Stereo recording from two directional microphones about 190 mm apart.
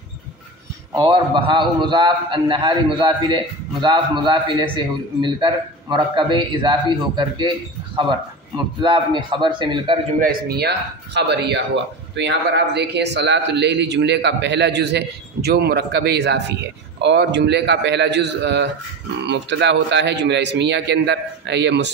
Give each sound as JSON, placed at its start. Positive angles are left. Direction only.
{"t": 0.9, "sound": "a man's voice", "side_deg": -25}
{"t": 10.1, "sound": "a man's voice", "side_deg": -55}